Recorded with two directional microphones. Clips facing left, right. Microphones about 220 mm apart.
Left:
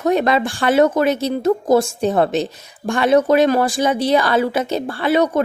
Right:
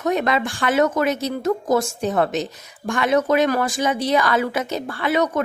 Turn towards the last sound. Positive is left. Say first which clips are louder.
# left 4 dB
turn(degrees=30)  # may be behind; listen again after turning